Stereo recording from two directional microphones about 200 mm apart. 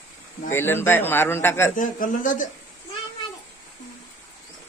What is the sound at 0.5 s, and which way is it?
A man's voice, 10° left (ahead or behind).